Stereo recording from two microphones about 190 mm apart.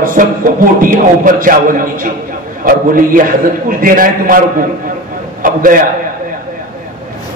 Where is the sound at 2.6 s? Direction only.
45° right (ahead or behind).